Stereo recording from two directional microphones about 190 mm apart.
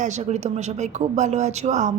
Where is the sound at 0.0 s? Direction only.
40° right (ahead or behind).